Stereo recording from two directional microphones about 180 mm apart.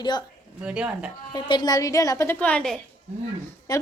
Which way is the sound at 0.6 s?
5° right (ahead or behind).